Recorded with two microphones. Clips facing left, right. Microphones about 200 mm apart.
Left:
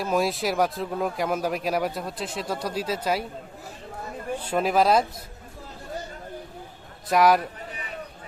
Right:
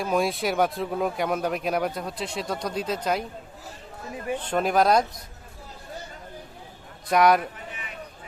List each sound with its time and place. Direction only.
0.0 s speech: centre (ahead or behind)
4.4 s speech: 5° left (ahead or behind)
7.1 s speech: centre (ahead or behind)